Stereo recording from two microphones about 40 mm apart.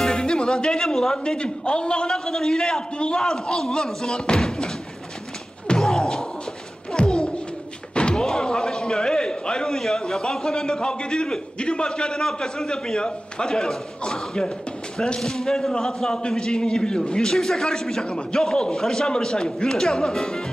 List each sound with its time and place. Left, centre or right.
0.1 s music: centre
1.2 s a man's voice: left
5.8 s slam: centre
7.0 s a sound: left
7.9 s a man's voice: left
17.3 s a man's voice: centre